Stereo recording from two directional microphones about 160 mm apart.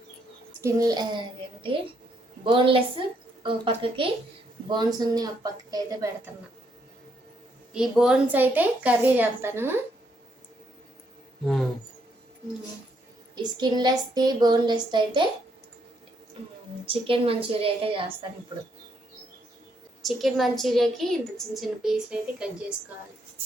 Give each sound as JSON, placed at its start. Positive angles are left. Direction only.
{"t": 0.6, "sound": "speech", "side_deg": -20}
{"t": 2.4, "sound": "a woman's voice", "side_deg": -35}
{"t": 7.7, "sound": "a woman's voice", "side_deg": -5}
{"t": 13.3, "sound": "speech", "side_deg": -25}
{"t": 16.8, "sound": "a woman's voice", "side_deg": -35}
{"t": 20.0, "sound": "a woman's voice", "side_deg": 0}